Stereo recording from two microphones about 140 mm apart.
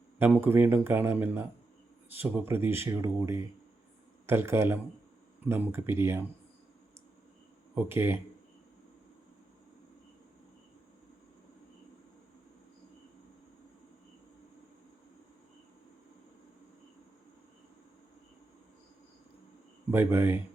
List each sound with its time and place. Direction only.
0.2 s speech: 15° right (ahead or behind)
7.8 s speech: 15° right (ahead or behind)
19.9 s speech: 15° right (ahead or behind)